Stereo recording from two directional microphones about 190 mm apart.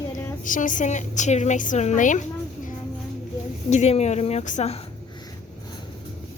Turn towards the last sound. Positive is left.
turn(degrees=40)  # may be behind; listen again after turning